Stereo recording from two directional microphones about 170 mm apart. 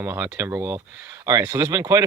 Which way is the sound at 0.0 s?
15° right (ahead or behind).